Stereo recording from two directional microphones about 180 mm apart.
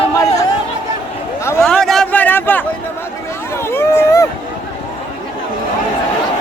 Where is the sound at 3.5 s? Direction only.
15° left (ahead or behind).